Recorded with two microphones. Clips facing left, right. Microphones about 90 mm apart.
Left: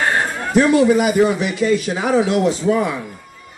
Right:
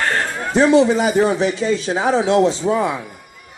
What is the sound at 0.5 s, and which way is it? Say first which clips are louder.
A man's voice: even; 25° right (ahead or behind).